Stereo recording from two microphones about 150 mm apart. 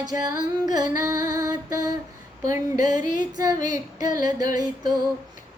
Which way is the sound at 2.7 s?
55° left (ahead or behind).